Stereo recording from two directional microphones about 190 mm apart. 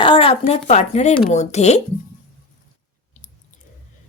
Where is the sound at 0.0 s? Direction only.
25° left (ahead or behind).